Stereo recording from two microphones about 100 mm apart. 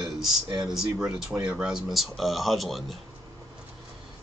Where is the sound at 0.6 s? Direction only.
5° right (ahead or behind).